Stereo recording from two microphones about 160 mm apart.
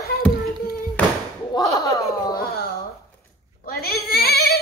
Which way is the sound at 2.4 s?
70° left (ahead or behind).